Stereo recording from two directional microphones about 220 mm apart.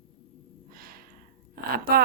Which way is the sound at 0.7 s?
40° right (ahead or behind).